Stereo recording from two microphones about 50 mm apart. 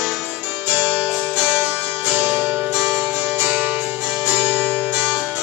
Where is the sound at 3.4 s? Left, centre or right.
Right.